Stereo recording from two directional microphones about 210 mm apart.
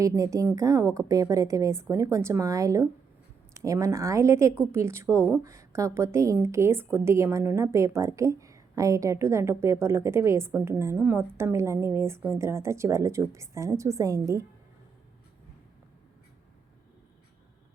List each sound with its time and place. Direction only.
0.0 s a woman's voice: 15° right (ahead or behind)